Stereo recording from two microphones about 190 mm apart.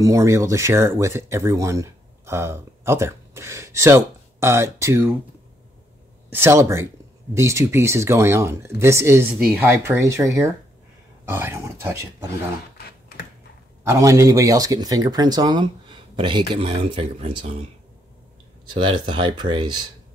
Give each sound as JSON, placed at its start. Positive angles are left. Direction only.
{"t": 0.0, "sound": "speech", "side_deg": -15}
{"t": 6.3, "sound": "speech", "side_deg": -15}
{"t": 12.7, "sound": "typing", "side_deg": 55}
{"t": 13.8, "sound": "speech", "side_deg": -15}
{"t": 18.7, "sound": "speech", "side_deg": -25}